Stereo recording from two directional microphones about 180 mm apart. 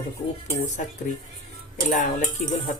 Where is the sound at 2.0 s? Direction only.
45° left (ahead or behind).